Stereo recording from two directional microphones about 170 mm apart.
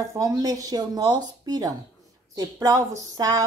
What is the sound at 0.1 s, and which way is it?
Speech, 20° right (ahead or behind).